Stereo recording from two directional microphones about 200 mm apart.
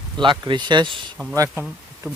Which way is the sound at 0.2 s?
25° right (ahead or behind).